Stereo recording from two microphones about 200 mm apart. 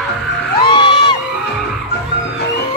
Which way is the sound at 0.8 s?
25° left (ahead or behind).